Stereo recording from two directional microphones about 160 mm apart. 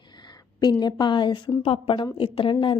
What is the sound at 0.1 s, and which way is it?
Speech, 25° left (ahead or behind).